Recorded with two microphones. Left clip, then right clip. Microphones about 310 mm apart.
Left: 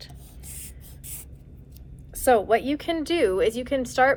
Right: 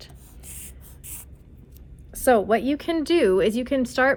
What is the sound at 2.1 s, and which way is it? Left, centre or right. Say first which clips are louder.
A woman's voice: right 1 dB; right.